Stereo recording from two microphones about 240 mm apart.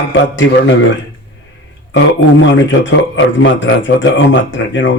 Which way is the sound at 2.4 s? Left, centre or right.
Left.